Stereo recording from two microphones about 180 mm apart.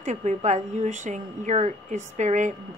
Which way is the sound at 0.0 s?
40° right (ahead or behind).